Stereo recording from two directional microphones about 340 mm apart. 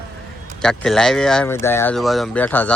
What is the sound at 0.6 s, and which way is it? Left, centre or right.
Speech, centre.